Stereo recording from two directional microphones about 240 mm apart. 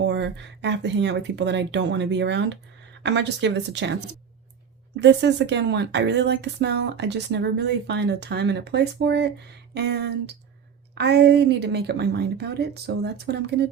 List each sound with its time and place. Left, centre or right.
0.0 s speech: right